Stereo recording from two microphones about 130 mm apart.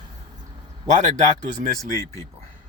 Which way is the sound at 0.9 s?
65° right (ahead or behind).